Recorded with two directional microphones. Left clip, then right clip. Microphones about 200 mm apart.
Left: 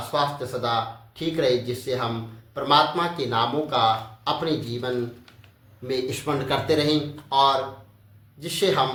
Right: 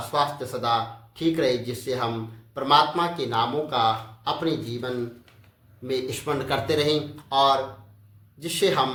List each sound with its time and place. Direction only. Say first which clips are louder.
0.1 s speech: even; 20° right (ahead or behind)
5.9 s speech: left 1 dB; 15° right (ahead or behind)